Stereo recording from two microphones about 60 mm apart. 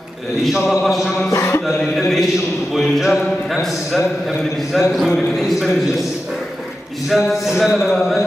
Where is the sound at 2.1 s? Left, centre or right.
Centre.